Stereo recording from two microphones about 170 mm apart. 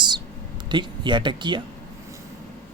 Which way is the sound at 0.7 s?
25° right (ahead or behind).